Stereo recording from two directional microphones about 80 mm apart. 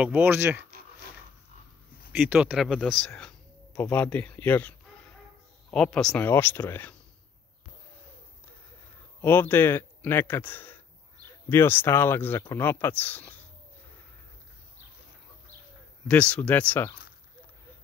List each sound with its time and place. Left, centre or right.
0.0 s speech: right
2.1 s speech: right
2.5 s speech: centre
3.2 s speech: centre
5.7 s speech: centre
6.2 s speech: left
9.2 s speech: left
16.1 s speech: centre